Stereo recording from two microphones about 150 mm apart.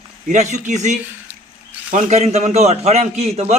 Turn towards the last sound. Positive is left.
turn(degrees=-45)  # may be behind; listen again after turning